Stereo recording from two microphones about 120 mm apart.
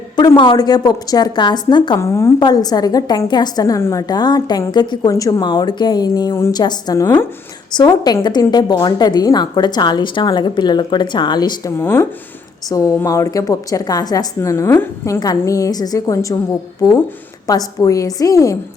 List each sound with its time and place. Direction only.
0.3 s a woman's voice: 35° left (ahead or behind)
2.0 s a woman's voice: 25° left (ahead or behind)
2.4 s a woman's voice: 35° left (ahead or behind)
11.8 s a woman's voice: 20° left (ahead or behind)